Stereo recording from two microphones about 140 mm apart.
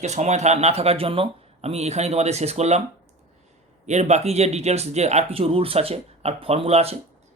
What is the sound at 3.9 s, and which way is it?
Speech, 55° right (ahead or behind).